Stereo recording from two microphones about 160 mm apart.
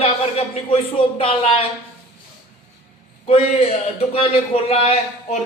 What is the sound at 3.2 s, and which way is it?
A man's voice, 40° left (ahead or behind).